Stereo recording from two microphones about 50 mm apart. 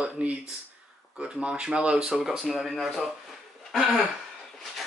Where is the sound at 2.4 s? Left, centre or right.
Centre.